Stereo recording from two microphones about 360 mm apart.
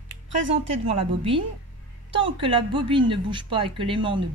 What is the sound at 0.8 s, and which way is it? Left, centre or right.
A woman's voice, centre.